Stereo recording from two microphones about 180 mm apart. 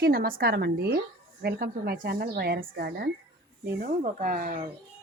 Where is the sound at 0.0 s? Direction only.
55° right (ahead or behind).